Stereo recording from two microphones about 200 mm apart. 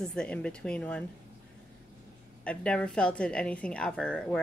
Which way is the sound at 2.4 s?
5° left (ahead or behind).